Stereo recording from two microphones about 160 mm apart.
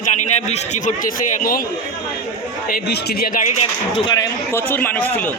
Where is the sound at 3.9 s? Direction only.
25° left (ahead or behind).